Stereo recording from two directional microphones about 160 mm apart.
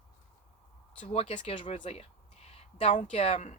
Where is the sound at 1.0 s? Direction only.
40° left (ahead or behind).